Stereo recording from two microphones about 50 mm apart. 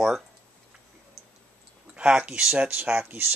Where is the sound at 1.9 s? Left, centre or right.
Right.